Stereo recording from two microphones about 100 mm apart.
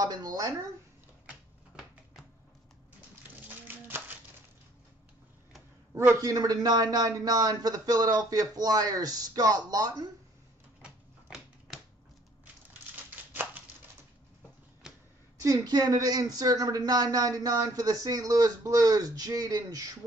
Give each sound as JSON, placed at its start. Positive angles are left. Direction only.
{"t": 0.0, "sound": "speech", "side_deg": -40}
{"t": 3.4, "sound": "music", "side_deg": -20}
{"t": 5.9, "sound": "speech", "side_deg": -30}
{"t": 10.8, "sound": "typewriter", "side_deg": -5}
{"t": 13.1, "sound": "a sound", "side_deg": -20}
{"t": 14.8, "sound": "a sound", "side_deg": -5}
{"t": 15.4, "sound": "speech", "side_deg": -40}